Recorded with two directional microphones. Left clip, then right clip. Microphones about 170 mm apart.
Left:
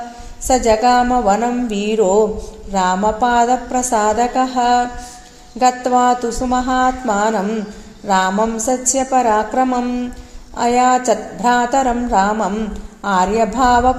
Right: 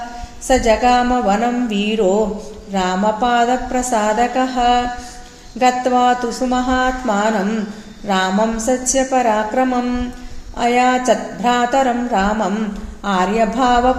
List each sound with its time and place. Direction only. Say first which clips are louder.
0.4 s speech: left 1 dB; 35° left (ahead or behind)